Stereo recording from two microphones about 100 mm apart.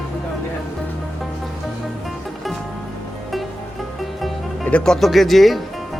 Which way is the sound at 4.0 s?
Centre (ahead or behind).